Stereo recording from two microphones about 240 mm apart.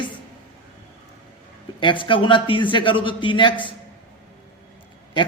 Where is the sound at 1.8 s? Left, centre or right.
Left.